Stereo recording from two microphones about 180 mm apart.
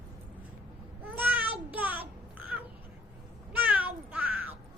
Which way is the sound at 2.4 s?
10° right (ahead or behind).